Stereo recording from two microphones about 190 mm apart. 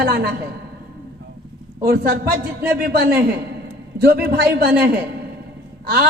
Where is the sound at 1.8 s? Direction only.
55° right (ahead or behind).